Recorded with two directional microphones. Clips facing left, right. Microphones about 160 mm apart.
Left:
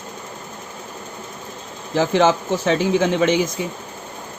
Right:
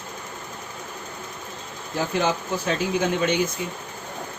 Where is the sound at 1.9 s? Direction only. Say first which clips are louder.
Left 8 dB; 90° left.